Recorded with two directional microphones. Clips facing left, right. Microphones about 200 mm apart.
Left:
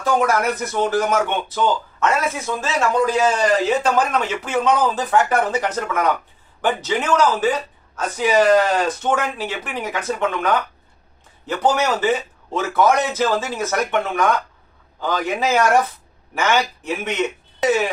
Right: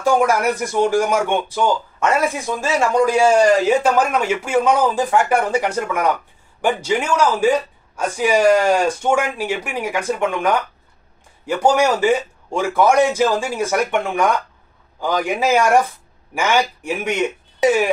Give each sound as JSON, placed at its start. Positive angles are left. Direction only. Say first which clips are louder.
{"t": 0.0, "sound": "speech", "louder": "right 2 dB", "side_deg": -10}